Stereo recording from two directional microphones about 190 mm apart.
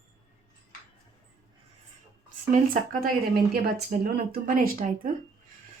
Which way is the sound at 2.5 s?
45° right (ahead or behind).